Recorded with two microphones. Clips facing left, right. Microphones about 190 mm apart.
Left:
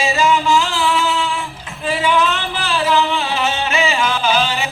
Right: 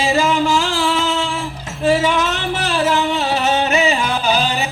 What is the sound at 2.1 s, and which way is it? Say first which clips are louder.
Music: left 1 dB; 45° right (ahead or behind).